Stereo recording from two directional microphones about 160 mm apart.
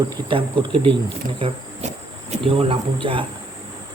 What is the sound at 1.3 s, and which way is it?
Cricket, 35° right (ahead or behind).